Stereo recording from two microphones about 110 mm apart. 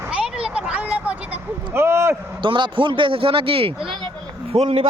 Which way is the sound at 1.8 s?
25° right (ahead or behind).